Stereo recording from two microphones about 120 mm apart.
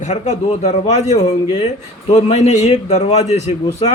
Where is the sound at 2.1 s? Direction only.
70° left (ahead or behind).